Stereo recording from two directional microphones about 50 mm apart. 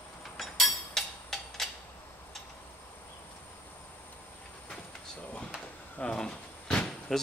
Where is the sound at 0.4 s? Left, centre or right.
Centre.